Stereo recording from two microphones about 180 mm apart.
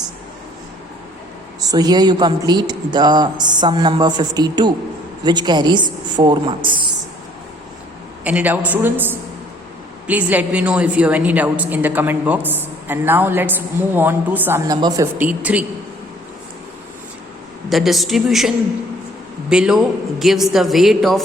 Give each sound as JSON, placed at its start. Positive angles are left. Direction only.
{"t": 1.6, "sound": "speech", "side_deg": -20}
{"t": 6.7, "sound": "a sound", "side_deg": -25}
{"t": 8.2, "sound": "a woman's voice", "side_deg": -10}
{"t": 17.7, "sound": "a woman's voice", "side_deg": 0}